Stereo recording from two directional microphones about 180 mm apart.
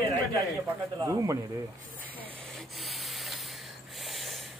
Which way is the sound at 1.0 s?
20° right (ahead or behind).